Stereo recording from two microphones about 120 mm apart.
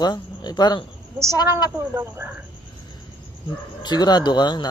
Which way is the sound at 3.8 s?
35° left (ahead or behind).